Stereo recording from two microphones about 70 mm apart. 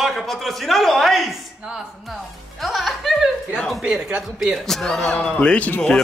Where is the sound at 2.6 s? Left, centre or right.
Centre.